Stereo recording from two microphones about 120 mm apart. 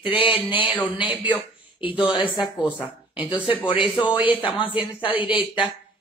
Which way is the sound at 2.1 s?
40° left (ahead or behind).